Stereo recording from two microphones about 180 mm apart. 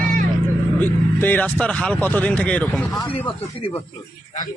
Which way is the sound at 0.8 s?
10° left (ahead or behind).